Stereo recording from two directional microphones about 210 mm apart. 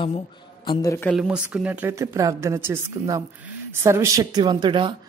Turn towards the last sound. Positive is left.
turn(degrees=-20)  # may be behind; listen again after turning